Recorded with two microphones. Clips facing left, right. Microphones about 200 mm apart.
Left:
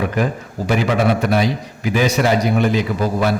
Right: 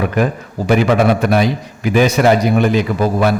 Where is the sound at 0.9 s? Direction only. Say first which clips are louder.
Right 3 dB; 55° right (ahead or behind).